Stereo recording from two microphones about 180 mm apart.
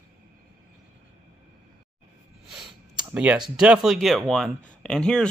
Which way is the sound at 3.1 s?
5° right (ahead or behind).